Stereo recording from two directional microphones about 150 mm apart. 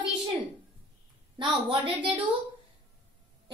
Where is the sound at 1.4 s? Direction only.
35° right (ahead or behind).